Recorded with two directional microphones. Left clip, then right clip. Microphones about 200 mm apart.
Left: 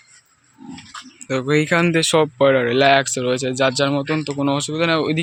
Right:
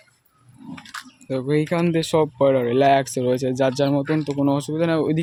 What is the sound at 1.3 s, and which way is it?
Speech, centre (ahead or behind).